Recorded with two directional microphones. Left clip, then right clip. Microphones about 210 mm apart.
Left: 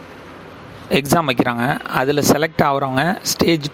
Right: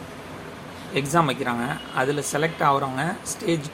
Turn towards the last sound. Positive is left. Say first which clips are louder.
# left 9 dB
turn(degrees=40)  # may be behind; listen again after turning